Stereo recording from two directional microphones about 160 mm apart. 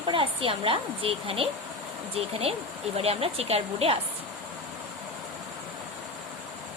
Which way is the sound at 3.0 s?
40° right (ahead or behind).